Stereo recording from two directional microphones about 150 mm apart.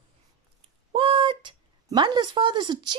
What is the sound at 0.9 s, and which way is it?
Speech, 35° right (ahead or behind).